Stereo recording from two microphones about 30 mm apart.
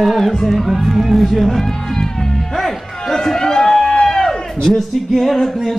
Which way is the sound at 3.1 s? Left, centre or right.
Centre.